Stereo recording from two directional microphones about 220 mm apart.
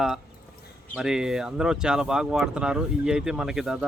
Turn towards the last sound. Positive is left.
turn(degrees=-5)  # may be behind; listen again after turning